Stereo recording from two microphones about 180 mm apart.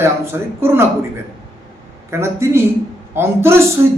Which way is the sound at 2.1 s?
15° right (ahead or behind).